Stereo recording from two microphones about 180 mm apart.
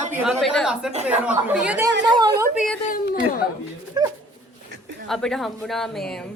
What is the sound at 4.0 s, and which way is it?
Speech, 20° right (ahead or behind).